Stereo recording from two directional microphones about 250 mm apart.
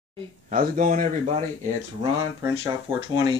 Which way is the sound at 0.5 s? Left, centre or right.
Right.